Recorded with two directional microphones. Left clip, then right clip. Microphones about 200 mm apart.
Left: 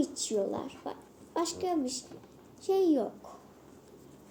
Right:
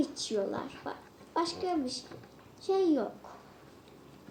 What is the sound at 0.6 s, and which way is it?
A woman's voice, 25° left (ahead or behind).